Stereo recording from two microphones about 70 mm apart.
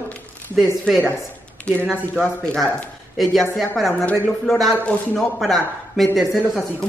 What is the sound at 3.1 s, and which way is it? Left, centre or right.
A woman's voice, centre.